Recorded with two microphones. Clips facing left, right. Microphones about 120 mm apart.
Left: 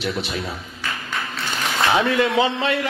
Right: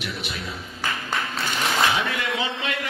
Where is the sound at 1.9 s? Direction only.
35° left (ahead or behind).